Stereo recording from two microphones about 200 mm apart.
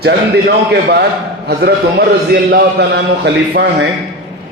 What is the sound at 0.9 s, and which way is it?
A man's voice, 55° right (ahead or behind).